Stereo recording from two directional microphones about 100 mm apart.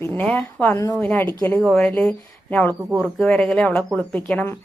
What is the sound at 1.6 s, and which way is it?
Speech, 5° left (ahead or behind).